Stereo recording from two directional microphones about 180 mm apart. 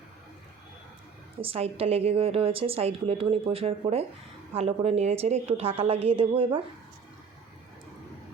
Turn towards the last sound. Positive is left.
turn(degrees=-30)  # may be behind; listen again after turning